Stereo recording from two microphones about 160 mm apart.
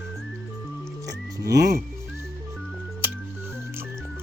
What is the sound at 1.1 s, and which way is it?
Music, 20° right (ahead or behind).